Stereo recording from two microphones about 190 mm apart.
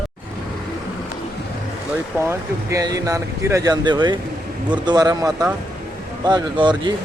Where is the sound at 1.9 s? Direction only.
15° right (ahead or behind).